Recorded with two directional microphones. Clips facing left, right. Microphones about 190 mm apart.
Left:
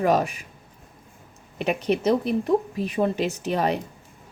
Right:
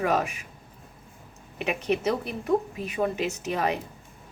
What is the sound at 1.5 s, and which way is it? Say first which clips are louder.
Speech: left 3 dB; 35° left (ahead or behind).